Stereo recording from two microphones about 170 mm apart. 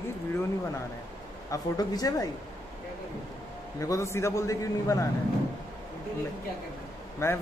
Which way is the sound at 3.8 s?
20° left (ahead or behind).